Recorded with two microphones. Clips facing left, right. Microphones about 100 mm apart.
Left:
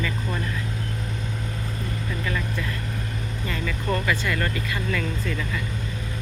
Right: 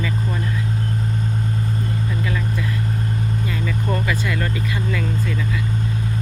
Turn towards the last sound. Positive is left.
turn(degrees=-15)  # may be behind; listen again after turning